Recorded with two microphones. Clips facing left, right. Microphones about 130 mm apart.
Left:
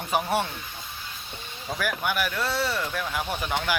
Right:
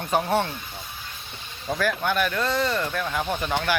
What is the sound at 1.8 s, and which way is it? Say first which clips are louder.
Speech: right 4 dB; 10° left (ahead or behind).